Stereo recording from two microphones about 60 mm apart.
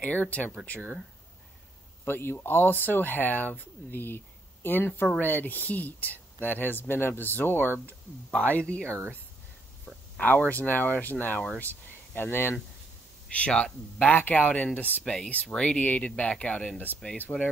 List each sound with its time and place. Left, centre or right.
0.0 s speech: left
2.0 s speech: left
8.3 s speech: left
10.5 s speech: left
13.3 s speech: centre
14.0 s speech: left
17.3 s speech: left